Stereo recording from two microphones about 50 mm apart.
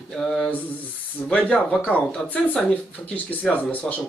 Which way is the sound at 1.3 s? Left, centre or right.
Left.